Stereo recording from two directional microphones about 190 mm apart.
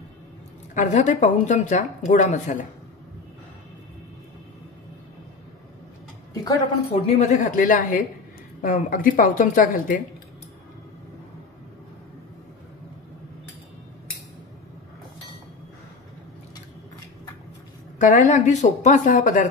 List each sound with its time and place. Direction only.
0.7 s speech: 40° left (ahead or behind)
6.4 s a woman's voice: 20° left (ahead or behind); by 10.0 s 45° left (ahead or behind)
17.9 s speech: 40° left (ahead or behind)